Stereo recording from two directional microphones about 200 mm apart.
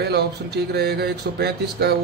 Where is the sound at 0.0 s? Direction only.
55° right (ahead or behind).